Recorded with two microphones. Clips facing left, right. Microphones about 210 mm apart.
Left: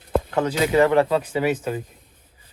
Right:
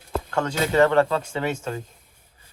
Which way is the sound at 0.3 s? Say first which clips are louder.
Even; 15° left (ahead or behind).